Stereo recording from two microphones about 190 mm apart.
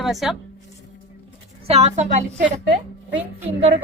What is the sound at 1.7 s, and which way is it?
Speech, 35° right (ahead or behind).